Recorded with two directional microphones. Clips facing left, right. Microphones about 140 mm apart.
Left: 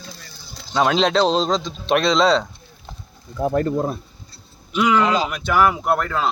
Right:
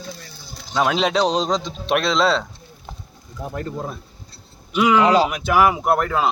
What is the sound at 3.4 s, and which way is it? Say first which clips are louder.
Speech: left 9 dB; 55° left (ahead or behind).